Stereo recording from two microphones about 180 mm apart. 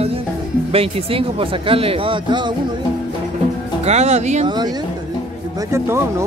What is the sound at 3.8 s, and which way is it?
Speech, 40° right (ahead or behind).